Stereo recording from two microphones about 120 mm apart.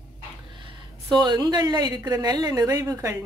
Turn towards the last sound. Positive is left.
turn(degrees=-25)  # may be behind; listen again after turning